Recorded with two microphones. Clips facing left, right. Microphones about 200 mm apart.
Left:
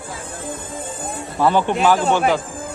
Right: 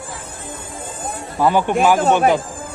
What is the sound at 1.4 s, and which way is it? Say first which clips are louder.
Speech: right 1 dB; 10° right (ahead or behind).